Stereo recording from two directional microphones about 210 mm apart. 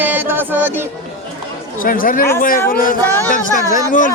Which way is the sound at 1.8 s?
40° left (ahead or behind).